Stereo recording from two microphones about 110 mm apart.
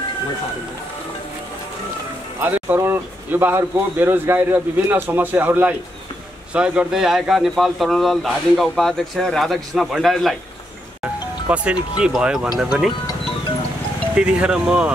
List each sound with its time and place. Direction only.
2.4 s speech: 15° right (ahead or behind); by 10.3 s centre (ahead or behind)
11.4 s speech: 10° right (ahead or behind)
14.1 s speech: 10° right (ahead or behind)